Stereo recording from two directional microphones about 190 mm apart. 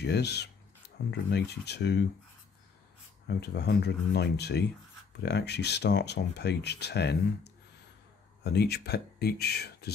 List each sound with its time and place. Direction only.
0.0 s speech: 60° left (ahead or behind)
3.3 s speech: 60° left (ahead or behind)